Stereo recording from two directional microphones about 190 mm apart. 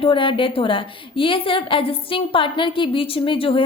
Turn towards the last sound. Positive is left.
turn(degrees=30)  # may be behind; listen again after turning